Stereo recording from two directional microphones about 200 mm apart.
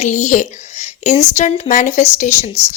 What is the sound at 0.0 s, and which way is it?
A woman's voice, 35° left (ahead or behind).